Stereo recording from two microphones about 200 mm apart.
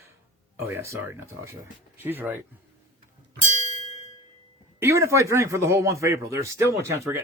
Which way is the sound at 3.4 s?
35° right (ahead or behind).